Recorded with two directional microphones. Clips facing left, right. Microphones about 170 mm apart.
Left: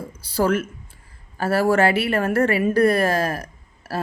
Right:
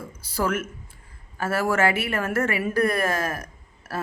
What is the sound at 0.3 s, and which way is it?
A woman's voice, 30° left (ahead or behind).